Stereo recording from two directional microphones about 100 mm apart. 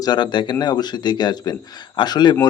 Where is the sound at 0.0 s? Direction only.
50° left (ahead or behind).